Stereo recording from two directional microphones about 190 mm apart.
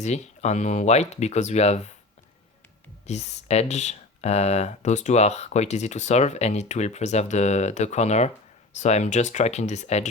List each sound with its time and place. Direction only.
0.0 s speech: 35° left (ahead or behind)
3.1 s speech: 35° left (ahead or behind)